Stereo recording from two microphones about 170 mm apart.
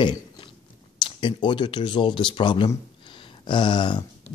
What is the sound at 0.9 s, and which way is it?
Speech, 25° left (ahead or behind).